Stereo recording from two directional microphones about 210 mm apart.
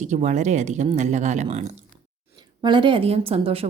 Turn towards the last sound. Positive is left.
turn(degrees=-25)  # may be behind; listen again after turning